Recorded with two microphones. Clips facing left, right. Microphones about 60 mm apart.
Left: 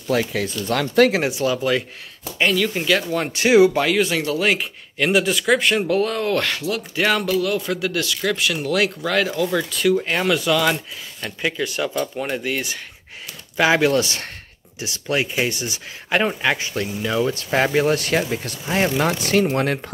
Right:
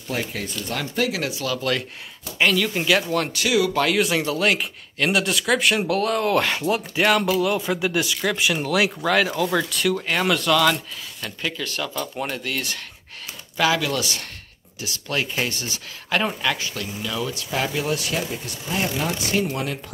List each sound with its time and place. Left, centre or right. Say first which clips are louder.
0.2 s speech: left 5 dB; left
1.1 s speech: left 6 dB; left
1.6 s speech: left 4 dB; centre
3.3 s speech: left 10 dB; left
3.8 s speech: left 1 dB; centre
8.6 s speech: left 1 dB; centre
11.9 s speech: left 4 dB; centre
13.6 s speech: left 5 dB; left
14.8 s speech: left 4 dB; left
18.3 s speech: left 5 dB; left
19.5 s speech: left 7 dB; left